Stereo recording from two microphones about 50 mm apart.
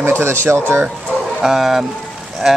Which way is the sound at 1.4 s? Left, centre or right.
Centre.